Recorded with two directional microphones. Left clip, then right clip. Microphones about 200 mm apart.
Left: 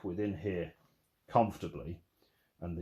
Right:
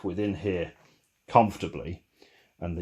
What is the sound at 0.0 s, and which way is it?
Speech, 50° right (ahead or behind).